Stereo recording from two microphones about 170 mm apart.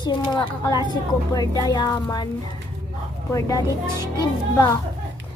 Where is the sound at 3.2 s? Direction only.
20° left (ahead or behind).